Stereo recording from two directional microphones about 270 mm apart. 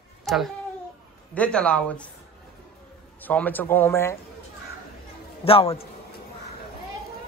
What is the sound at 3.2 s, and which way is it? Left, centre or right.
Speech, centre.